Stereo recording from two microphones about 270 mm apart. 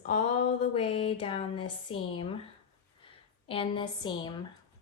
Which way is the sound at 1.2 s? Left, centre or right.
Centre.